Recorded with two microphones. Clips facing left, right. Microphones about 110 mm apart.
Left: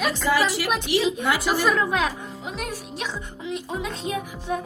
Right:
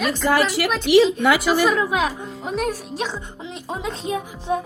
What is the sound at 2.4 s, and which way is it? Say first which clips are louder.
Speech: right 9 dB; 45° right (ahead or behind).